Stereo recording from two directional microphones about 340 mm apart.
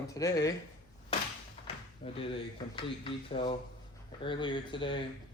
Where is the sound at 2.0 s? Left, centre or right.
Centre.